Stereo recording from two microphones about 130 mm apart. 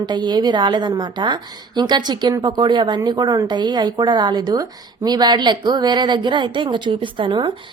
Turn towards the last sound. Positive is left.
turn(degrees=-40)  # may be behind; listen again after turning